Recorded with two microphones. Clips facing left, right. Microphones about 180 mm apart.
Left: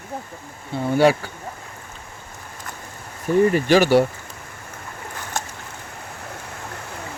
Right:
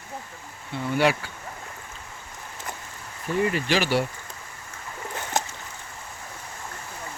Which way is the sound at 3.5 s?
45° left (ahead or behind).